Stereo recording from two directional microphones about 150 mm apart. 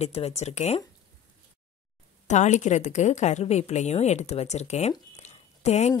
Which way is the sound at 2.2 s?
50° left (ahead or behind).